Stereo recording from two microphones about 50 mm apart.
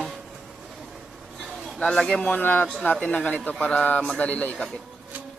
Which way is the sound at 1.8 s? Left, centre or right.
Centre.